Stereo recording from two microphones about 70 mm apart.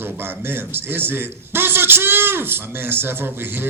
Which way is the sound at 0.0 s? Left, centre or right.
Right.